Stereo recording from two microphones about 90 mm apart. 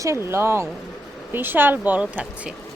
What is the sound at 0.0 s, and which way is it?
A woman's voice, 30° right (ahead or behind).